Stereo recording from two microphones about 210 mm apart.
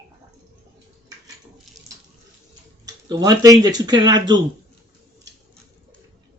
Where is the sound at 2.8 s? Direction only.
20° right (ahead or behind).